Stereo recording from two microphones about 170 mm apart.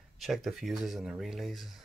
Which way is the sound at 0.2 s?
Centre (ahead or behind).